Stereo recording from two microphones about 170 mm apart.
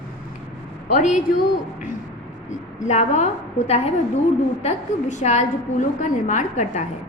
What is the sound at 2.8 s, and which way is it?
A woman's voice, 40° left (ahead or behind).